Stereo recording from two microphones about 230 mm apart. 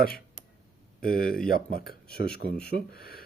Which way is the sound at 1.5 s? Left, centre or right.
Left.